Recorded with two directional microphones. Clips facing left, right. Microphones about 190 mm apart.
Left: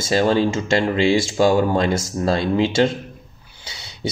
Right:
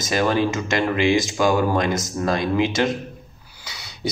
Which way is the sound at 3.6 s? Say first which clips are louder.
Even; 25° left (ahead or behind).